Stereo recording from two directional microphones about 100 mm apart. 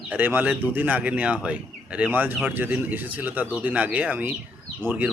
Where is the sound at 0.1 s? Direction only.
15° right (ahead or behind).